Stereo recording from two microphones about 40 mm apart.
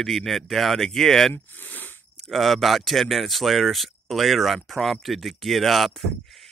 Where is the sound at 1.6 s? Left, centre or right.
Left.